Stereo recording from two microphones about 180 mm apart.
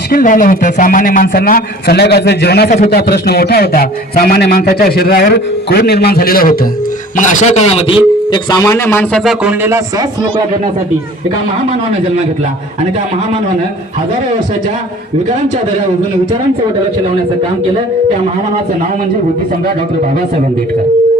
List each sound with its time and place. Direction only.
0.1 s a man's voice: 50° left (ahead or behind)
7.2 s a man's voice: 45° left (ahead or behind); by 9.2 s 15° left (ahead or behind)
9.2 s speech: 5° right (ahead or behind)